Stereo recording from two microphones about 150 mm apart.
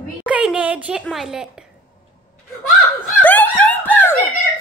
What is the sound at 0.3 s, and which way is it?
A woman's voice, 10° right (ahead or behind).